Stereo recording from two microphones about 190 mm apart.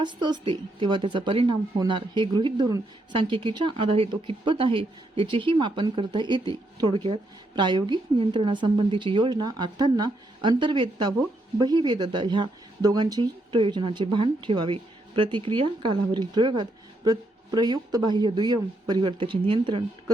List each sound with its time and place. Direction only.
0.0 s a woman's voice: 25° right (ahead or behind)